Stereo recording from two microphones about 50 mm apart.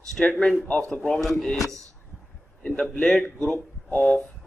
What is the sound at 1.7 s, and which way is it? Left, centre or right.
Speech, right.